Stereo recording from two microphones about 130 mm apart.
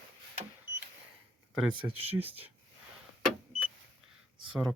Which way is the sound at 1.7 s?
40° right (ahead or behind).